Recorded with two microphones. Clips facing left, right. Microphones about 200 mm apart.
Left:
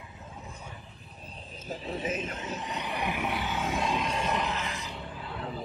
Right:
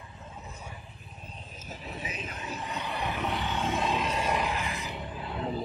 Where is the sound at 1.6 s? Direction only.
30° left (ahead or behind); by 4.8 s 15° right (ahead or behind).